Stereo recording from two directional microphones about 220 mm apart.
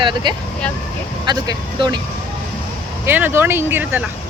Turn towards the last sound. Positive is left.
turn(degrees=-10)  # may be behind; listen again after turning